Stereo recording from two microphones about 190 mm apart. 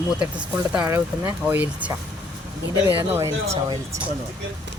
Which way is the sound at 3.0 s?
15° right (ahead or behind).